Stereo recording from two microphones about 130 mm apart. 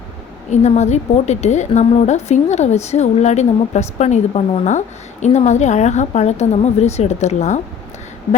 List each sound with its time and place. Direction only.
0.5 s a woman's voice: 60° left (ahead or behind)